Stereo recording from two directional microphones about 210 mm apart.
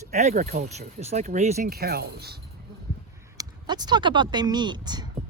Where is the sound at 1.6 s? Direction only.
45° right (ahead or behind).